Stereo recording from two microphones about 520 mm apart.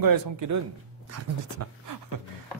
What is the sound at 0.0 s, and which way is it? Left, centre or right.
Speech, right.